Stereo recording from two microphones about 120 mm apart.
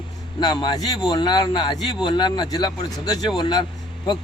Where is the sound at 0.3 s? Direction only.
40° left (ahead or behind).